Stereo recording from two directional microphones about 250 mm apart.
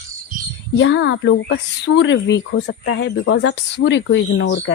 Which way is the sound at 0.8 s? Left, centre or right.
Left.